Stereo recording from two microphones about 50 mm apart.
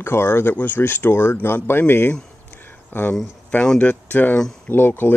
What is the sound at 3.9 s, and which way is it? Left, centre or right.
Speech, left.